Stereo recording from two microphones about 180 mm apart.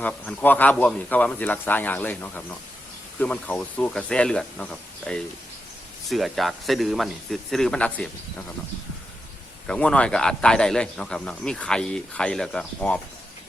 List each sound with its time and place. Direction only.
0.0 s a man's voice: 5° left (ahead or behind)
9.6 s a man's voice: 5° left (ahead or behind)